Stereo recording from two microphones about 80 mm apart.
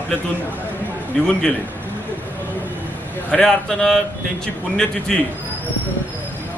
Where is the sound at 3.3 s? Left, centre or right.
Centre.